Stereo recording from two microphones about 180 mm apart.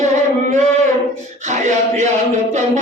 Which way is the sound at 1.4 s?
40° right (ahead or behind).